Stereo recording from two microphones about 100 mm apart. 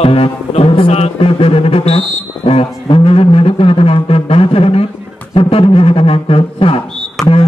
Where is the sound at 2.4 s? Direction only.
65° left (ahead or behind).